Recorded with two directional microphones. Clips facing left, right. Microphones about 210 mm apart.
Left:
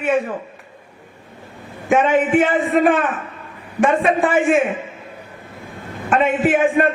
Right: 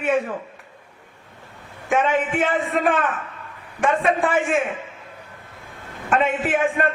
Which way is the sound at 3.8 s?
20° left (ahead or behind).